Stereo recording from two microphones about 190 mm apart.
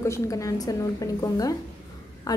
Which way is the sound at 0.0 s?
15° left (ahead or behind).